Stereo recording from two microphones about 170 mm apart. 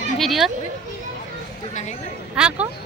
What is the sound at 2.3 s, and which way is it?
Speech, 5° right (ahead or behind).